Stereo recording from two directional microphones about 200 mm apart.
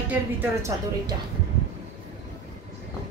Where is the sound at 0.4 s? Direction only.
15° right (ahead or behind).